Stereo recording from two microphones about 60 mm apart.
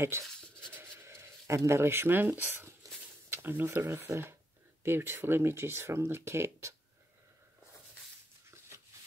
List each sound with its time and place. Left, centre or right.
0.1 s speech: right
1.0 s a sound: right
1.7 s speech: right